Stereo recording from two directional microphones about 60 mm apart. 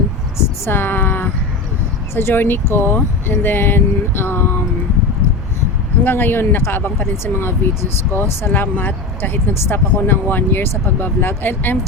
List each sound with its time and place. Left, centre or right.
0.6 s speech: left
6.1 s speech: left
8.6 s speech: left